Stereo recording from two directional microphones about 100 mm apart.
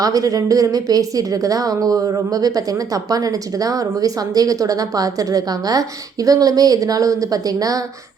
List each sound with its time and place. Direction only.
0.0 s a woman's voice: 35° right (ahead or behind)